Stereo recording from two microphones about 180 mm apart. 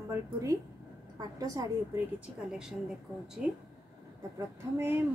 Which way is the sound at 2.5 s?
5° right (ahead or behind).